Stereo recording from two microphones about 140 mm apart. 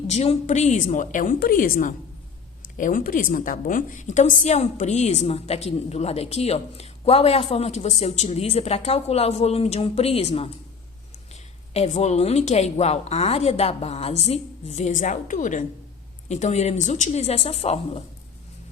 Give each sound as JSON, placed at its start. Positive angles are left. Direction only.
{"t": 0.1, "sound": "a woman's voice", "side_deg": 50}
{"t": 11.7, "sound": "a woman's voice", "side_deg": 50}